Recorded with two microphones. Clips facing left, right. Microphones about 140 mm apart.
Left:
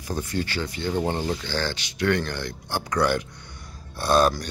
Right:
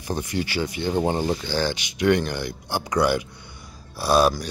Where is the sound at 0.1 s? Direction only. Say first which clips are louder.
Right 2 dB; 15° right (ahead or behind).